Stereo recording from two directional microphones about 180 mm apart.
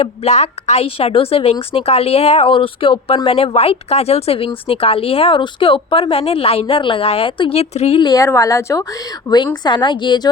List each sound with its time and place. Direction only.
0.0 s a woman's voice: 35° left (ahead or behind)